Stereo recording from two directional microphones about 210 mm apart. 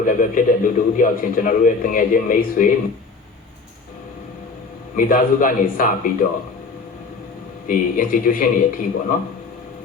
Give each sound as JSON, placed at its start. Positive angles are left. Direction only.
{"t": 0.0, "sound": "a man's voice", "side_deg": 40}
{"t": 4.9, "sound": "a man's voice", "side_deg": 40}
{"t": 7.7, "sound": "a man's voice", "side_deg": 40}